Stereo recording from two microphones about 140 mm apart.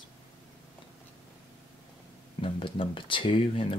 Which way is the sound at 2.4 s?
40° left (ahead or behind).